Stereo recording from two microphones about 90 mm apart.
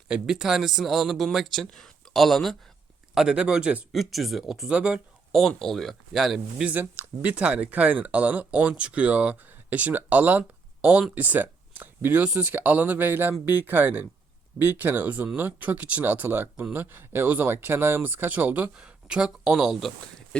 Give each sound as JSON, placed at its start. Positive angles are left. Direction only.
{"t": 0.1, "sound": "speech", "side_deg": -5}
{"t": 3.9, "sound": "speech", "side_deg": 0}
{"t": 5.3, "sound": "speech", "side_deg": 5}
{"t": 6.7, "sound": "speech", "side_deg": -20}
{"t": 20.3, "sound": "speech", "side_deg": 10}